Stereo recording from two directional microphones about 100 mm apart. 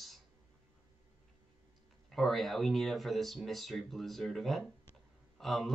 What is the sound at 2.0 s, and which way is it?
Speech, 5° left (ahead or behind).